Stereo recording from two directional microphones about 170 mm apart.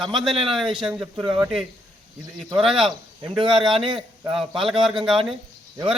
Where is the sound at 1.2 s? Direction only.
25° right (ahead or behind).